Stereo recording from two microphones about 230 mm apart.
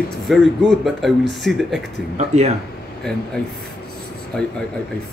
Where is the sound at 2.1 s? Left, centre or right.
Right.